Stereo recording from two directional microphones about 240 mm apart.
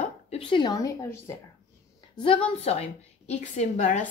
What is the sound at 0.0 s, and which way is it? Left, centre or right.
A woman's voice, left.